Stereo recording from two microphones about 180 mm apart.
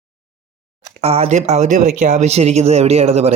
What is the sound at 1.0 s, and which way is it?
Speech, 35° right (ahead or behind).